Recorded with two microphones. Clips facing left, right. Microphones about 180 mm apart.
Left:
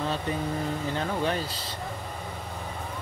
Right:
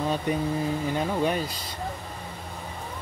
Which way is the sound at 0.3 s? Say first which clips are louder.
Right 3 dB; 15° right (ahead or behind).